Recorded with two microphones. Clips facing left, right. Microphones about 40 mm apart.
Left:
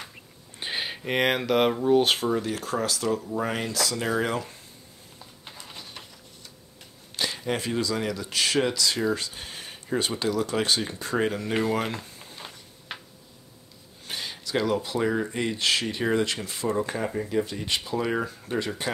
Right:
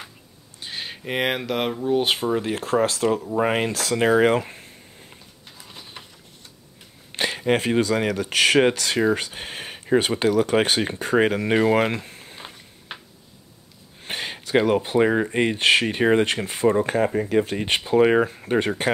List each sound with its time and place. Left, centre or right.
0.7 s speech: centre
2.3 s speech: right
7.2 s speech: right
12.9 s a sound: centre
14.0 s speech: right
17.3 s speech: right